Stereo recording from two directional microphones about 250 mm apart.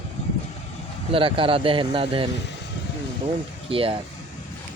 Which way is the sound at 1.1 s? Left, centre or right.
Right.